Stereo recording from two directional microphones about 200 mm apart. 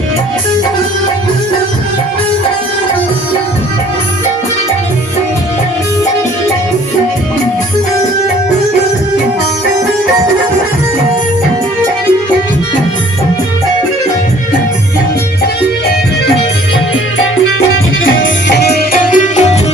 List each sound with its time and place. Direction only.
18.0 s music: 70° left (ahead or behind); by 19.5 s 35° left (ahead or behind)